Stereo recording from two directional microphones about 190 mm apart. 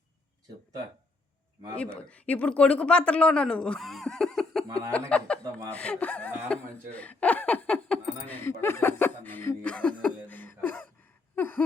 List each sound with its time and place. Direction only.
1.7 s speech: 5° left (ahead or behind)
5.4 s speech: 20° right (ahead or behind)
5.7 s speech: 5° left (ahead or behind)
6.9 s laughter: 5° left (ahead or behind)
11.3 s a sound: 10° left (ahead or behind)